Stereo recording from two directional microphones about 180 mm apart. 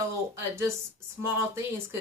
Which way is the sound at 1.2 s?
15° right (ahead or behind).